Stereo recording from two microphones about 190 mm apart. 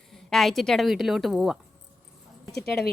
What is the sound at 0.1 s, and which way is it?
A woman's voice, centre (ahead or behind).